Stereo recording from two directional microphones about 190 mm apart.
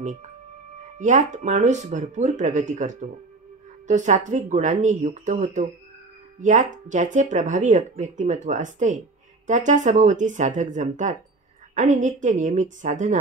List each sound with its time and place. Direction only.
0.0 s speech: 40° right (ahead or behind)